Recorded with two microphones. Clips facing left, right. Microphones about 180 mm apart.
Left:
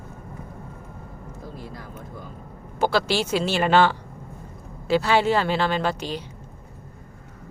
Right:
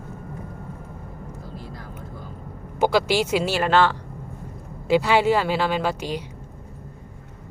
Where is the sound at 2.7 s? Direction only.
15° right (ahead or behind); by 3.9 s centre (ahead or behind).